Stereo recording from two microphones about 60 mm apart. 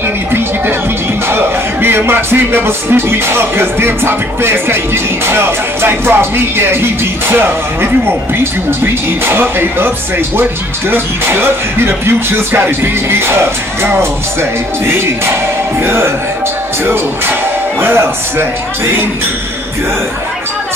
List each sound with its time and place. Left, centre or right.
1.3 s speech: right
15.8 s speech: right